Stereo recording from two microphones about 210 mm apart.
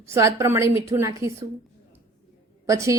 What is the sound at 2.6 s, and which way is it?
Speech, 15° right (ahead or behind).